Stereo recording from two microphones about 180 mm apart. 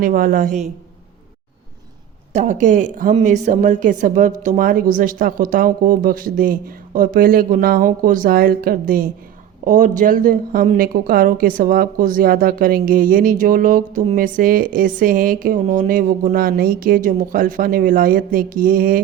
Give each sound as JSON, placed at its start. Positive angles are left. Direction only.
{"t": 0.0, "sound": "a woman's voice", "side_deg": -50}
{"t": 2.3, "sound": "a woman's voice", "side_deg": -45}